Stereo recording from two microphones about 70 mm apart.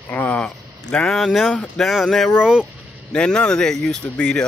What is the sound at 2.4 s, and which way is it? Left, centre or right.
Speech, centre.